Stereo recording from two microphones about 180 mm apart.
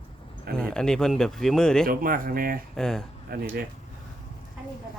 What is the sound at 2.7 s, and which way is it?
Speech, 5° left (ahead or behind).